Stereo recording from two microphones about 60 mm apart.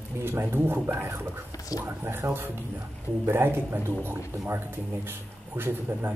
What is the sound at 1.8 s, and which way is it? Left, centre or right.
Speech, right.